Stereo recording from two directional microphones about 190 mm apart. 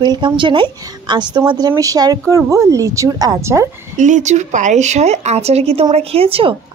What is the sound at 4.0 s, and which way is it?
Speech, 40° right (ahead or behind).